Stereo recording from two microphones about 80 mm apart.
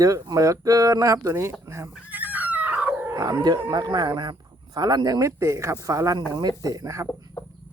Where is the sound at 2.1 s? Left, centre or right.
Right.